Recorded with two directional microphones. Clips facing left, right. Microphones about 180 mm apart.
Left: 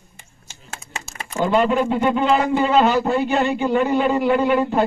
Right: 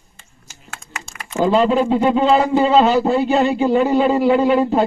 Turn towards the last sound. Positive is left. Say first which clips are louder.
# right 3 dB
turn(degrees=-35)  # may be behind; listen again after turning